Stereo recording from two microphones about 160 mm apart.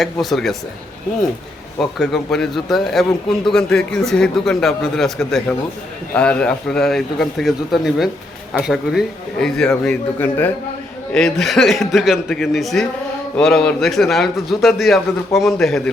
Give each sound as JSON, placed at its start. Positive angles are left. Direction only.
{"t": 0.0, "sound": "a man's voice", "side_deg": 0}
{"t": 1.8, "sound": "a man's voice", "side_deg": 0}